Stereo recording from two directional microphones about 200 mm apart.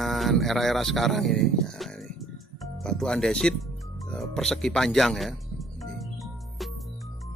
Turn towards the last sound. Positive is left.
turn(degrees=0)  # may be behind; listen again after turning